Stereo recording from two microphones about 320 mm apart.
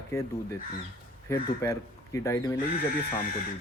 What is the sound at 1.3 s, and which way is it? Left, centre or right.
Speech, centre.